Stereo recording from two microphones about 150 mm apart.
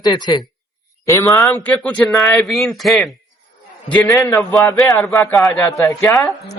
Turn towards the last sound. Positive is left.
turn(degrees=20)  # may be behind; listen again after turning